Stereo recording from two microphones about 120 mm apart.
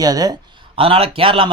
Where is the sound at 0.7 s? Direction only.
50° right (ahead or behind).